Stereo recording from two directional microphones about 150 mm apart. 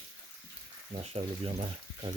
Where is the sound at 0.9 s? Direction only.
45° right (ahead or behind).